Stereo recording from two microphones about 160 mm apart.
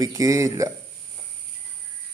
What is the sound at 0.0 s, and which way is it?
Speech, 20° right (ahead or behind).